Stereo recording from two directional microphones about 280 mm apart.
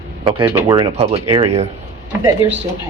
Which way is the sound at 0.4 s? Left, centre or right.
Centre.